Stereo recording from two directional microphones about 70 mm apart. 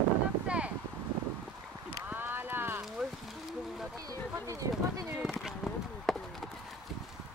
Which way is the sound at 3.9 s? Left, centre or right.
Right.